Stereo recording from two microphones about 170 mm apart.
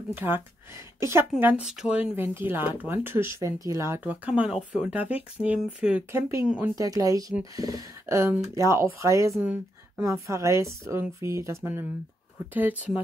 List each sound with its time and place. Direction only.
0.1 s a woman's voice: 10° right (ahead or behind)
6.7 s speech: 20° right (ahead or behind)